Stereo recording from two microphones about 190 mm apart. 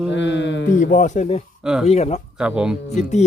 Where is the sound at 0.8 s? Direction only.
40° left (ahead or behind).